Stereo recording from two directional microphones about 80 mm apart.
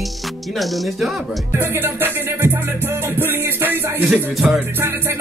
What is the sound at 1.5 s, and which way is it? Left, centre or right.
Music, right.